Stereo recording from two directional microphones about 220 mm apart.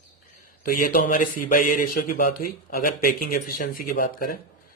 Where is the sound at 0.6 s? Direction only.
40° left (ahead or behind).